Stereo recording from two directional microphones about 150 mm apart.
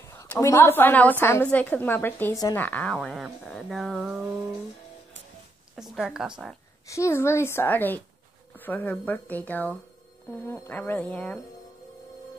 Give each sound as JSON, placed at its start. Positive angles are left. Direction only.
{"t": 0.1, "sound": "a woman's voice", "side_deg": 15}
{"t": 5.8, "sound": "speech", "side_deg": -5}
{"t": 6.9, "sound": "a woman's voice", "side_deg": 20}